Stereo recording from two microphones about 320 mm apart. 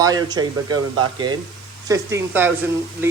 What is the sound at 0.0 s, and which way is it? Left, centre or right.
Speech, centre.